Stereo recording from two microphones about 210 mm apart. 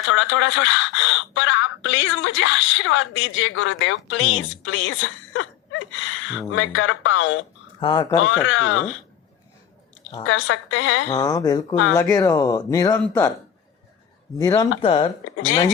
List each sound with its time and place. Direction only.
0.0 s speech: 65° left (ahead or behind)
5.9 s a sound: 65° left (ahead or behind)
6.5 s speech: 70° left (ahead or behind)
7.8 s speech: 20° left (ahead or behind)
8.4 s speech: 65° left (ahead or behind)
10.2 s speech: 70° left (ahead or behind)
11.1 s speech: 15° left (ahead or behind)
14.3 s speech: 15° left (ahead or behind)